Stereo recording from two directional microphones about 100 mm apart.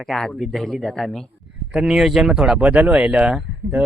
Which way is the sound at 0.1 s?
5° left (ahead or behind).